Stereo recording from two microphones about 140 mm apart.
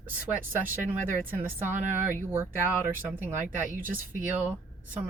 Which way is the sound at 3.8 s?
75° right (ahead or behind).